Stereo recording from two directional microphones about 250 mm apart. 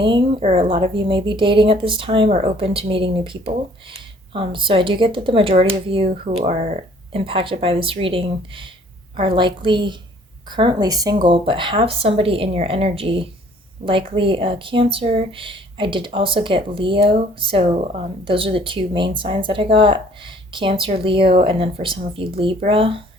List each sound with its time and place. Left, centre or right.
0.0 s speech: centre